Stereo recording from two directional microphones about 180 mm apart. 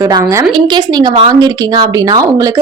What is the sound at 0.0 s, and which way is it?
A woman's voice, 15° right (ahead or behind).